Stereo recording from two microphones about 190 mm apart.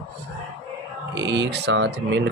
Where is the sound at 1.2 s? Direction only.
65° right (ahead or behind).